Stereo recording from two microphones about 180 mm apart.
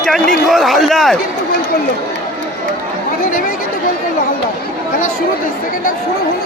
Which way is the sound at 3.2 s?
50° left (ahead or behind).